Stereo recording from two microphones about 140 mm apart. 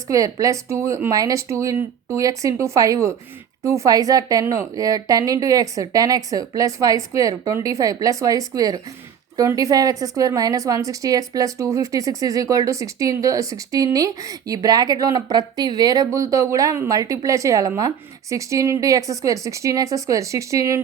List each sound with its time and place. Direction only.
0.1 s a woman's voice: 25° right (ahead or behind)